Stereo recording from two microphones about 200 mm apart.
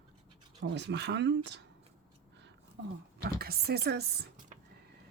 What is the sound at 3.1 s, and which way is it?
Speech, 50° right (ahead or behind).